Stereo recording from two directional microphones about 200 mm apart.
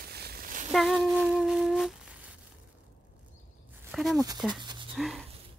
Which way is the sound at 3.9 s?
Centre (ahead or behind).